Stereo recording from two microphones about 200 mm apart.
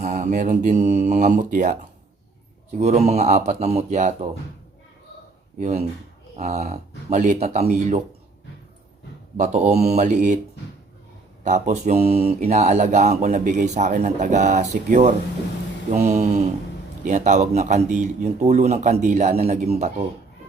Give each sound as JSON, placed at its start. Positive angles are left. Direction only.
{"t": 0.0, "sound": "mantra", "side_deg": -40}
{"t": 1.5, "sound": "speech", "side_deg": -45}
{"t": 2.8, "sound": "mantra", "side_deg": -35}
{"t": 5.5, "sound": "mantra", "side_deg": -35}
{"t": 9.4, "sound": "mantra", "side_deg": -35}
{"t": 11.4, "sound": "mantra", "side_deg": -35}